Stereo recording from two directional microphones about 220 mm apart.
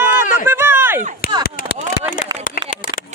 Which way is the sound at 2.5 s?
40° left (ahead or behind).